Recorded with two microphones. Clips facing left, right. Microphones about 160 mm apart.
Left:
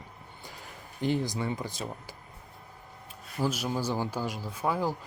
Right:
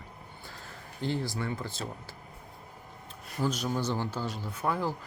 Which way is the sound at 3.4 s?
10° left (ahead or behind).